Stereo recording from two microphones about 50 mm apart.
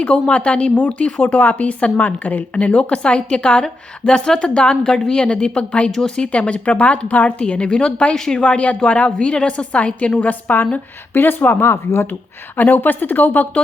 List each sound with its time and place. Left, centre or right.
0.0 s speech: left
5.9 s speech: centre
6.3 s speech: left
8.4 s speech: left
12.5 s speech: left